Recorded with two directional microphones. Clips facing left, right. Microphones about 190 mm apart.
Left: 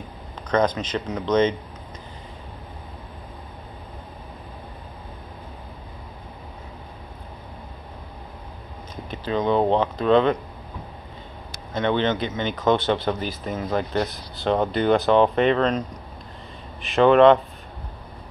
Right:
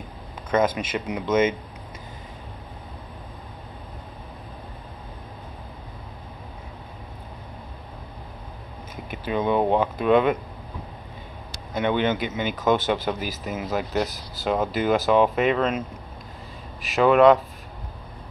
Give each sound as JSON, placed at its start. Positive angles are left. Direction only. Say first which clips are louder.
{"t": 0.5, "sound": "speech", "louder": "left 1 dB", "side_deg": -5}
{"t": 9.1, "sound": "speech", "louder": "left 1 dB", "side_deg": -10}
{"t": 11.7, "sound": "speech", "louder": "left 1 dB", "side_deg": -10}
{"t": 16.8, "sound": "speech", "louder": "left 2 dB", "side_deg": 0}